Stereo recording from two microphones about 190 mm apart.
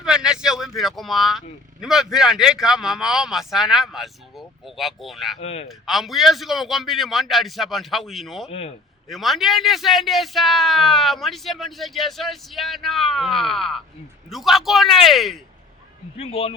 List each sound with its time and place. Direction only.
0.0 s speech: 5° right (ahead or behind)
5.4 s speech: 35° left (ahead or behind)
5.6 s speech: centre (ahead or behind)
8.4 s speech: 35° left (ahead or behind)
9.0 s speech: centre (ahead or behind)
16.1 s speech: 30° left (ahead or behind)